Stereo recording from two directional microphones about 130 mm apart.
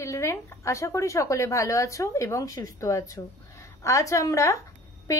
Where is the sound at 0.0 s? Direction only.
20° left (ahead or behind).